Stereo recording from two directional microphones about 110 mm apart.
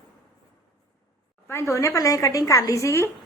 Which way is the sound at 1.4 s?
25° left (ahead or behind).